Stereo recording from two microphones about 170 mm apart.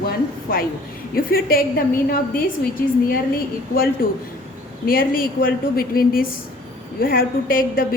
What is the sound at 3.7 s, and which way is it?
A woman's voice, 60° left (ahead or behind).